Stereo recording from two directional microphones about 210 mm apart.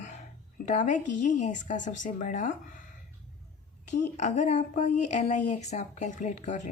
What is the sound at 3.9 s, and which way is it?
Speech, 35° left (ahead or behind).